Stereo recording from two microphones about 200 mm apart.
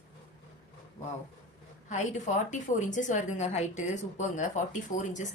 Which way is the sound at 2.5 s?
40° left (ahead or behind).